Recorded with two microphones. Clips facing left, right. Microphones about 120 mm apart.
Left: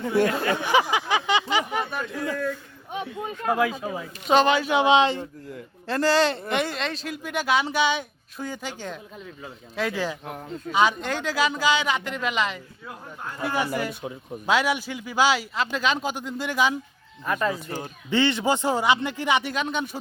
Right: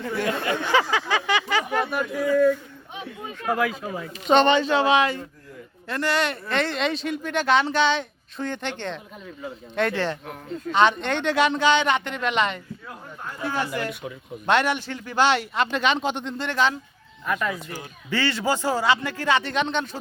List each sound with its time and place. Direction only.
0.5 s a sound: 15° left (ahead or behind)
1.9 s a sound: 10° right (ahead or behind)
3.4 s speech: 20° left (ahead or behind)
6.5 s speech: 15° left (ahead or behind)
6.7 s speech: centre (ahead or behind)
14.0 s speech: 25° left (ahead or behind)
14.4 s speech: 5° left (ahead or behind)
17.2 s speech: 30° left (ahead or behind); by 20.0 s 10° left (ahead or behind)